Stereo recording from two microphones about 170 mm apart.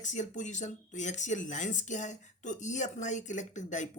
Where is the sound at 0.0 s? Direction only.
45° left (ahead or behind).